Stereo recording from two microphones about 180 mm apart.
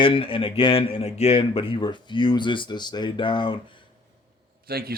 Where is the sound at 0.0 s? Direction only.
30° left (ahead or behind).